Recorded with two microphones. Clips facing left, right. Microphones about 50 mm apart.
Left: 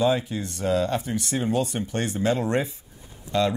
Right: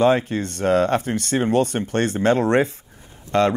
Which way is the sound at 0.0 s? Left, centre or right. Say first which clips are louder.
Right 5 dB; right.